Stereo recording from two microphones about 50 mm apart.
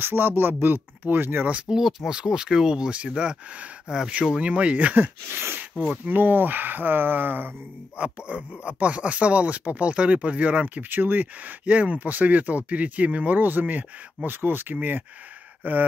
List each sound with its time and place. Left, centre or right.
0.0 s speech: right
1.7 s speech: centre
2.0 s speech: centre; by 5.1 s right
5.3 s speech: right
6.0 s speech: right
8.0 s speech: right
10.8 s speech: right
13.4 s speech: right